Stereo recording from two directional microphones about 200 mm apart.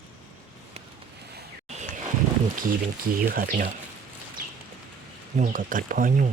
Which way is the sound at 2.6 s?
45° right (ahead or behind).